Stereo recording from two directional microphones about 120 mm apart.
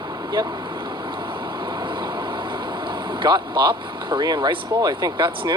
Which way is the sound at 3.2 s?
35° right (ahead or behind).